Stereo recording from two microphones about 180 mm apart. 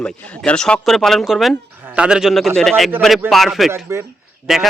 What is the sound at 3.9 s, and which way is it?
Speech, 15° right (ahead or behind).